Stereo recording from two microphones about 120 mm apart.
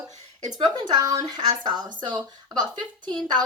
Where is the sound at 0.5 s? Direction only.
35° right (ahead or behind).